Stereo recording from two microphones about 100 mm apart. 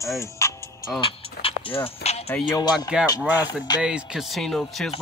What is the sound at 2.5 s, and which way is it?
Speech, 40° left (ahead or behind).